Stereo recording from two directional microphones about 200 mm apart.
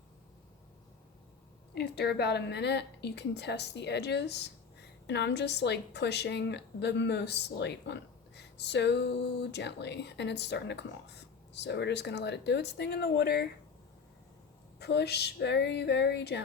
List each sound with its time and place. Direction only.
1.7 s a woman's voice: 55° left (ahead or behind)
14.8 s a woman's voice: 55° left (ahead or behind)